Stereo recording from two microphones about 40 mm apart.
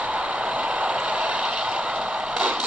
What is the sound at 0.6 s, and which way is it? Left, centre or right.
Mechanisms, right.